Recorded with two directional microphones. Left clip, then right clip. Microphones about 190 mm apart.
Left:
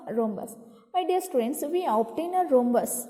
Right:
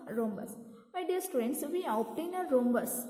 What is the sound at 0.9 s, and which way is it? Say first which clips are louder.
A woman's voice: left 8 dB; 25° left (ahead or behind).